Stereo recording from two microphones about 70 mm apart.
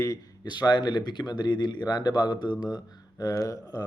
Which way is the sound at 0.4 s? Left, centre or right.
Left.